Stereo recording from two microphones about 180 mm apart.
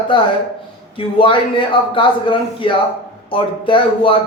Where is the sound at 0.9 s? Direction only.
30° left (ahead or behind).